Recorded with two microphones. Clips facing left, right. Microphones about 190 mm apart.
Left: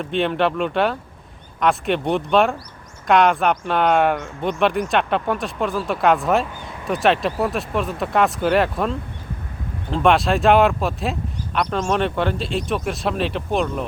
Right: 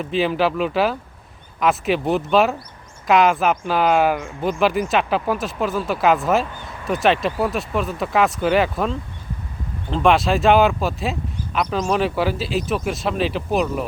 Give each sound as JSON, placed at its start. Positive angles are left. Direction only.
{"t": 0.0, "sound": "speech", "side_deg": -5}